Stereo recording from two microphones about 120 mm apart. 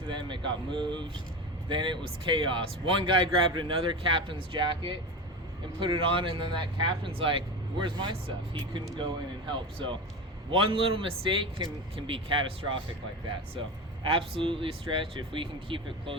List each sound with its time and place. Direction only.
0.1 s speech: 40° right (ahead or behind)
9.5 s speech: 45° right (ahead or behind)
14.0 s speech: 50° right (ahead or behind)